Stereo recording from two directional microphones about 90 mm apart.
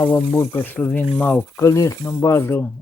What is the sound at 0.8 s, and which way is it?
Speech, 15° left (ahead or behind).